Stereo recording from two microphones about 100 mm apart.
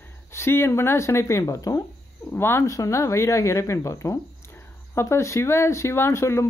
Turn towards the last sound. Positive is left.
turn(degrees=30)  # may be behind; listen again after turning